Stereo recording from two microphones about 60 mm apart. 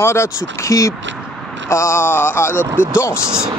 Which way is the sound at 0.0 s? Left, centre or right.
Left.